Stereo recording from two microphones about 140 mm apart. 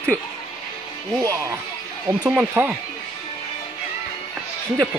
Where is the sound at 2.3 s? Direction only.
10° right (ahead or behind).